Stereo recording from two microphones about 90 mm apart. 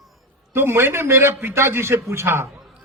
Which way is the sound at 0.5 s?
25° right (ahead or behind).